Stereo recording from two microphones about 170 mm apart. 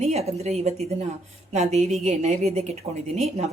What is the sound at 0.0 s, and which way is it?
Speech, 40° right (ahead or behind).